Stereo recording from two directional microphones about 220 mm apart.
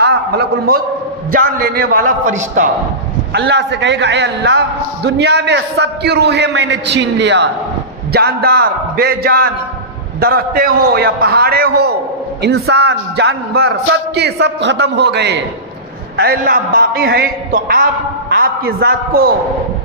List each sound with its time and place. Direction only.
0.0 s a man's voice: 50° right (ahead or behind)
3.3 s a man's voice: 50° right (ahead or behind)